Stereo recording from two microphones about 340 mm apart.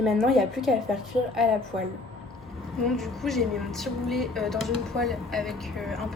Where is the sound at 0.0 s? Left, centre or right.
Centre.